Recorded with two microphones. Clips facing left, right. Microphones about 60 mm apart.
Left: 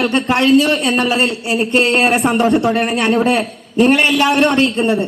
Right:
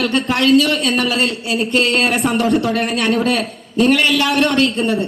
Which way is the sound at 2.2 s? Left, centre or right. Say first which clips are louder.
Left 2 dB; left.